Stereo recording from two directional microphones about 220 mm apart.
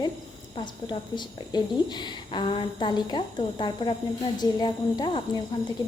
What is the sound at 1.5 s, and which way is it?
A woman's voice, 20° left (ahead or behind).